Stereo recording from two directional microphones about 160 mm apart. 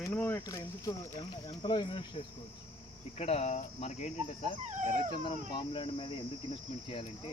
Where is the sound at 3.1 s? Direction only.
40° left (ahead or behind).